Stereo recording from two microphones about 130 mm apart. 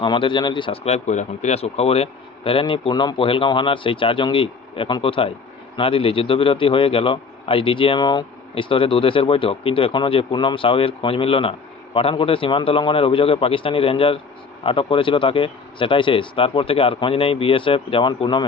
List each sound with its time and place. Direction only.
0.0 s speech: 40° left (ahead or behind)
0.9 s a man's voice: 60° left (ahead or behind); by 18.4 s 35° left (ahead or behind)